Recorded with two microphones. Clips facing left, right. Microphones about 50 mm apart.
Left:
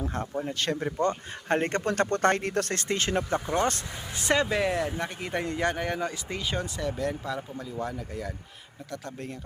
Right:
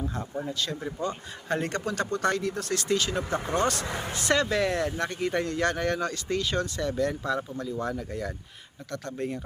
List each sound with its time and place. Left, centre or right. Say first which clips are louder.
0.4 s speech: left 3 dB; left
1.5 s speech: left 3 dB; left
2.7 s speech: right 1 dB; left
3.2 s speech: left 1 dB; right
3.5 s speech: even; left
4.2 s speech: even; centre